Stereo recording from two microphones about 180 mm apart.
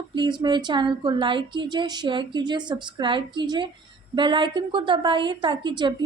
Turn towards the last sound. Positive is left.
turn(degrees=-25)  # may be behind; listen again after turning